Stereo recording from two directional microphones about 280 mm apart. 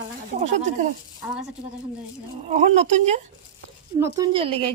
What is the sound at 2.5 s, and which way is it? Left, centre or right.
A woman's voice, right.